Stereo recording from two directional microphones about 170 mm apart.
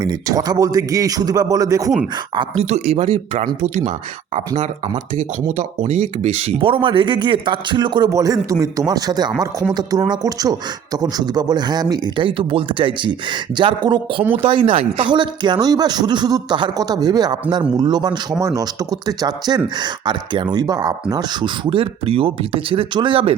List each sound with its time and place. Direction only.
0.0 s speech: 20° right (ahead or behind)
2.6 s speech: 40° right (ahead or behind)